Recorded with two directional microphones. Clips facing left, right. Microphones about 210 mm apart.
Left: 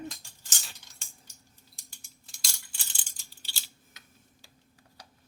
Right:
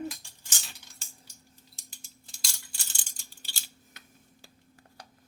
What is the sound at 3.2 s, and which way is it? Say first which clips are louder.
Scissors: right 2 dB; 50° right (ahead or behind).